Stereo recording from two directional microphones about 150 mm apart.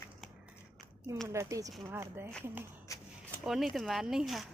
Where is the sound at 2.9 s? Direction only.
20° left (ahead or behind).